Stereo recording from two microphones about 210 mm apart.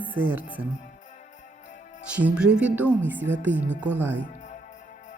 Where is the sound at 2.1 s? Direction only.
5° right (ahead or behind).